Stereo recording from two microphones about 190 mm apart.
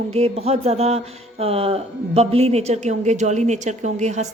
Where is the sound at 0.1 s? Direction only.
30° right (ahead or behind).